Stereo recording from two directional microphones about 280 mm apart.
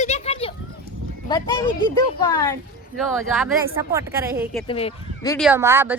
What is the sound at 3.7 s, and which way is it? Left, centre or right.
Speech, centre.